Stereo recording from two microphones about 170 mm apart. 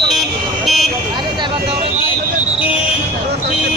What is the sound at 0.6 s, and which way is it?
Vehicle, centre (ahead or behind).